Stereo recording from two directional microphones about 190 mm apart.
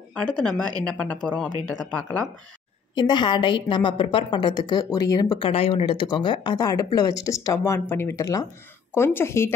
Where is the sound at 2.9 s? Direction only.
25° left (ahead or behind).